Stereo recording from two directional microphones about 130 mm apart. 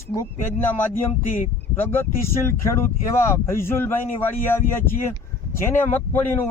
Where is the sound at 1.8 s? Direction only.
15° left (ahead or behind).